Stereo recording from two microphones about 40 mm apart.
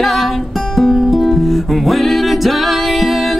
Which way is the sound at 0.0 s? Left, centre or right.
Centre.